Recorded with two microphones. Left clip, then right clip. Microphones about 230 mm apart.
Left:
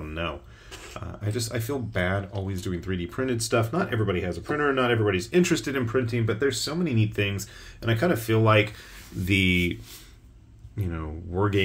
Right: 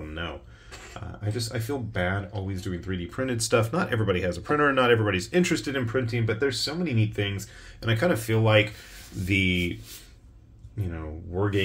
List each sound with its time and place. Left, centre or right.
0.0 s a sound: centre
0.9 s speech: centre
9.2 s speech: centre
10.8 s speech: centre